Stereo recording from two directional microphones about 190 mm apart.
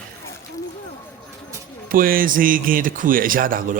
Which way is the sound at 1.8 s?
50° right (ahead or behind).